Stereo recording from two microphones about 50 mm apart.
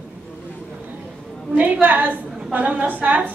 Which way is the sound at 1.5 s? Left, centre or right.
Right.